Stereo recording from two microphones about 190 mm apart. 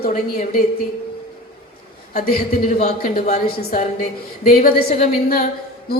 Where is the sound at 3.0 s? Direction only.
45° left (ahead or behind).